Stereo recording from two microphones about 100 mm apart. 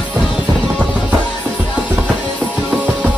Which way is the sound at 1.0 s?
15° right (ahead or behind).